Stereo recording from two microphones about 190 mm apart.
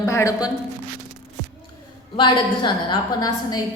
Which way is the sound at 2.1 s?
25° left (ahead or behind).